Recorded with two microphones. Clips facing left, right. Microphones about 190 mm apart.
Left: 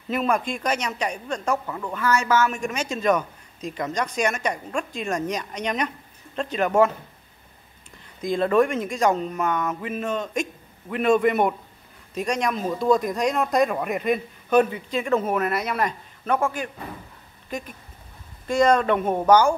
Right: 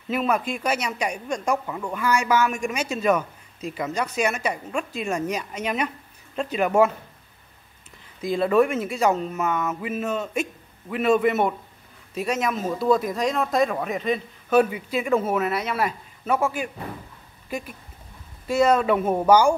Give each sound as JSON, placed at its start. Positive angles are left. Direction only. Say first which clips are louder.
{"t": 0.1, "sound": "speech", "louder": "even", "side_deg": -5}
{"t": 8.2, "sound": "speech", "louder": "even", "side_deg": -5}
{"t": 14.6, "sound": "speech", "louder": "right 1 dB", "side_deg": -5}